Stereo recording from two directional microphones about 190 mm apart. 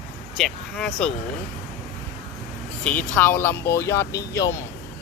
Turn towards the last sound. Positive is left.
turn(degrees=15)  # may be behind; listen again after turning